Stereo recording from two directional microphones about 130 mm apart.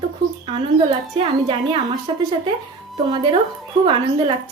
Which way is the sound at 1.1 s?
40° right (ahead or behind).